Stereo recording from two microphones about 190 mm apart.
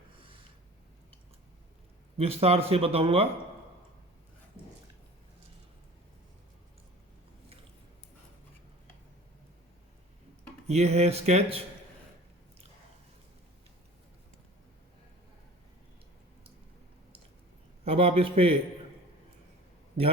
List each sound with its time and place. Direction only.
2.1 s speech: 30° right (ahead or behind)
10.7 s speech: 35° right (ahead or behind)
17.8 s speech: 30° right (ahead or behind)